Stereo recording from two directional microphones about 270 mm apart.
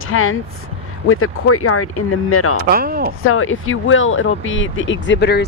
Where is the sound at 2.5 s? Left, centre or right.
Right.